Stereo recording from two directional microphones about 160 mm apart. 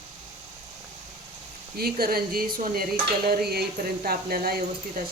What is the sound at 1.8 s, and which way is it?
Speech, 70° right (ahead or behind).